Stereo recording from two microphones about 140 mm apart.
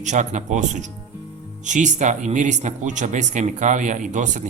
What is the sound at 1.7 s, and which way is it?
Speech, 60° right (ahead or behind).